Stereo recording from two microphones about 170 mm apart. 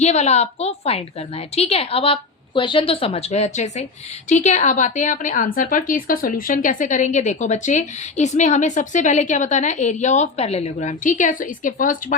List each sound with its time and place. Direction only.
0.0 s a woman's voice: 40° left (ahead or behind)